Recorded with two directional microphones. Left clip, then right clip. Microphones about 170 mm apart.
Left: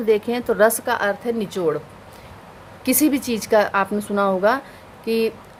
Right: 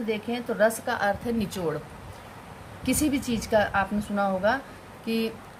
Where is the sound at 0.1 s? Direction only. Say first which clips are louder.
Left 12 dB; 50° left (ahead or behind).